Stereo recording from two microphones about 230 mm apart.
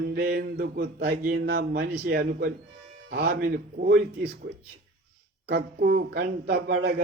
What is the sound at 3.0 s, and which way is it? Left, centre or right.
Mantra, right.